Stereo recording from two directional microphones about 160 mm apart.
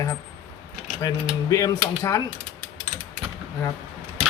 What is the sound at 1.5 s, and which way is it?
Mechanisms, 20° left (ahead or behind).